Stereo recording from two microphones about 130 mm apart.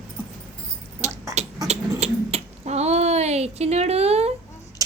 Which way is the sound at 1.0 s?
60° right (ahead or behind).